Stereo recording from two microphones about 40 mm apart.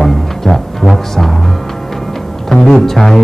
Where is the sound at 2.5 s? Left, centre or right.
Centre.